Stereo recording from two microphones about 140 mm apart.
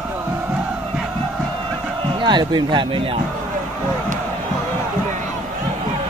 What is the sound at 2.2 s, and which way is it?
Speech, 35° right (ahead or behind).